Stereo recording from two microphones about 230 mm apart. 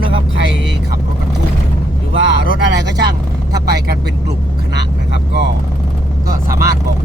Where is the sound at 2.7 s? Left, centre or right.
Right.